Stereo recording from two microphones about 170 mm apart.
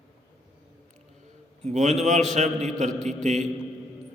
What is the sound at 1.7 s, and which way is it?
A man's voice, 45° right (ahead or behind).